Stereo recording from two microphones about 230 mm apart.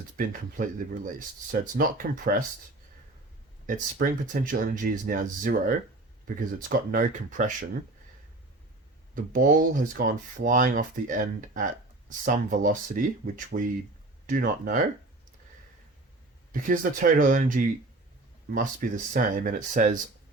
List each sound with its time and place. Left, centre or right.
0.2 s speech: right
3.7 s speech: right
9.1 s speech: right
16.5 s speech: right